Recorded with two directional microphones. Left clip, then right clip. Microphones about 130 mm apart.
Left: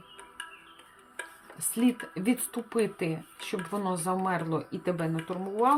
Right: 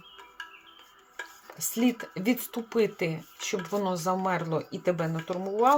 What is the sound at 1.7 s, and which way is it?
Speech, 20° right (ahead or behind).